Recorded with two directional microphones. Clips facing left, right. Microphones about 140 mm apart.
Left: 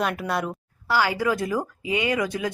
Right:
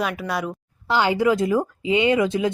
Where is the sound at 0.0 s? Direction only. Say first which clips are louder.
Even; centre (ahead or behind).